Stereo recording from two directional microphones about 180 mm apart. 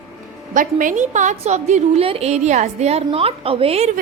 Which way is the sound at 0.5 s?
50° right (ahead or behind).